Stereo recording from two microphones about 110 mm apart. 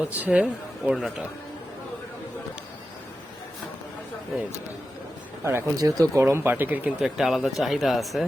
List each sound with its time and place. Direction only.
0.0 s speech: 15° right (ahead or behind)
5.4 s speech: 25° right (ahead or behind)
5.7 s speech: 35° right (ahead or behind); by 6.9 s 15° right (ahead or behind)
7.0 s speech: centre (ahead or behind)